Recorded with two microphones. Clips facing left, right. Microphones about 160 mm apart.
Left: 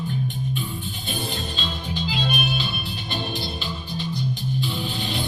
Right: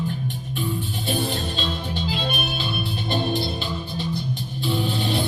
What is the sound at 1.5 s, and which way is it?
Music, 55° right (ahead or behind).